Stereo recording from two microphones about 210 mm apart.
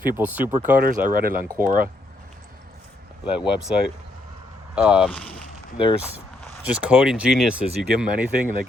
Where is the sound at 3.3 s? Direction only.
5° right (ahead or behind).